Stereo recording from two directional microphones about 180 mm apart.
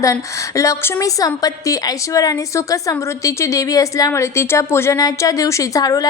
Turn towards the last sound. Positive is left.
turn(degrees=20)  # may be behind; listen again after turning